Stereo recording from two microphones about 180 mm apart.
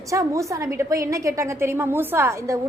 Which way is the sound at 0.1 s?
15° right (ahead or behind).